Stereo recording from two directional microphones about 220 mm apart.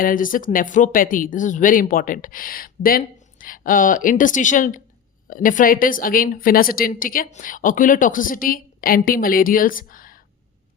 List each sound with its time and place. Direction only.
0.0 s a woman's voice: 40° left (ahead or behind)